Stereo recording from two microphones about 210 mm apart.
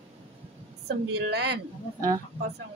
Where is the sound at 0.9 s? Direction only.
50° right (ahead or behind).